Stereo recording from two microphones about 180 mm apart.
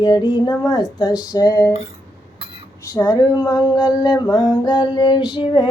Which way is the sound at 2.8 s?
20° left (ahead or behind).